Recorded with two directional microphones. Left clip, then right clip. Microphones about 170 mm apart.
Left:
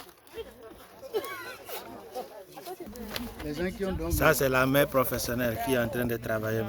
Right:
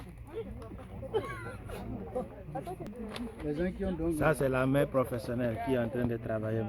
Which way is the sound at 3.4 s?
50° right (ahead or behind).